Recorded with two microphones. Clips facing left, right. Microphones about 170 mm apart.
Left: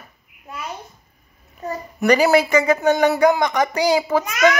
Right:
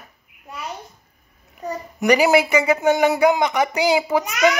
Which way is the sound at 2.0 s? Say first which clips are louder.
Left 1 dB; 15° right (ahead or behind).